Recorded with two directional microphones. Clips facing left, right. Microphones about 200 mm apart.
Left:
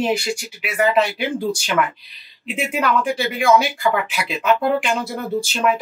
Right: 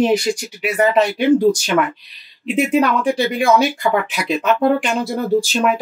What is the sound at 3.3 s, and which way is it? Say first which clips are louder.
Speech: left 2 dB; 35° right (ahead or behind).